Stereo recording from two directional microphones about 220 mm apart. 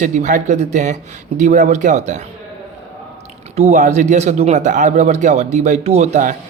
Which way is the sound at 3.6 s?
35° right (ahead or behind).